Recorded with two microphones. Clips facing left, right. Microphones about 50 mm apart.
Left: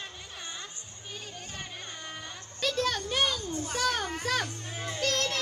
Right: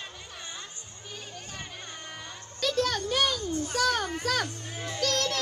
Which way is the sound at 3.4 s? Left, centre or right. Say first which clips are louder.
Right 3 dB; left.